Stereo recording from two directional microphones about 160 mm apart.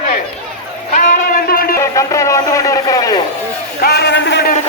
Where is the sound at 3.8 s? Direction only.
90° left.